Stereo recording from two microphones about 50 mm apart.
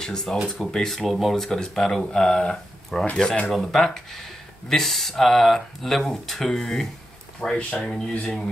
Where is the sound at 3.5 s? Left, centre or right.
Centre.